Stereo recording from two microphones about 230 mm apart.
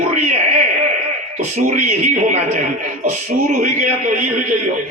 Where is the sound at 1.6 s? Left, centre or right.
Right.